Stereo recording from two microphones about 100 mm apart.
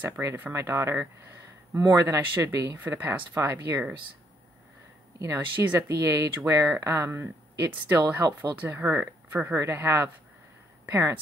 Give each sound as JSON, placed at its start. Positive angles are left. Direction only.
{"t": 0.0, "sound": "speech", "side_deg": -25}
{"t": 5.2, "sound": "speech", "side_deg": -30}